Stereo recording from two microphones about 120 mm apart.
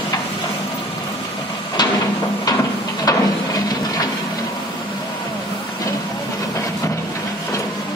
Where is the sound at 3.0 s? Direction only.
30° left (ahead or behind).